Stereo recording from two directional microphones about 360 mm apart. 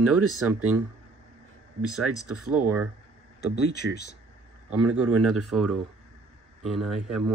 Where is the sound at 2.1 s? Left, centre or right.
Right.